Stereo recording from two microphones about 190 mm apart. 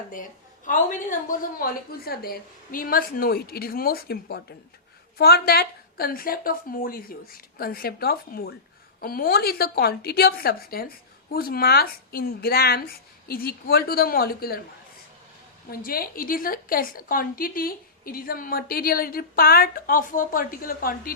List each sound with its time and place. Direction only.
0.1 s a woman's voice: 45° left (ahead or behind)
15.7 s a woman's voice: 50° left (ahead or behind)